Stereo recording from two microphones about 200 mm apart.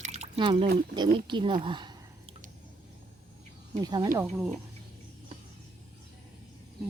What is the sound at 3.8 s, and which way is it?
Speech, 20° right (ahead or behind).